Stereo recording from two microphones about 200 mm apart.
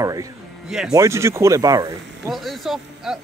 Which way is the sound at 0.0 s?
15° right (ahead or behind).